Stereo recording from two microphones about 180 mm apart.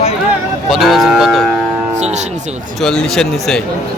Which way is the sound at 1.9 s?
40° right (ahead or behind).